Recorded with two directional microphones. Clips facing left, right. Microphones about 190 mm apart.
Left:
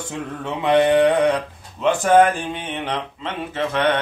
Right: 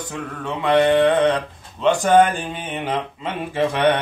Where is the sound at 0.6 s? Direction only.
20° left (ahead or behind).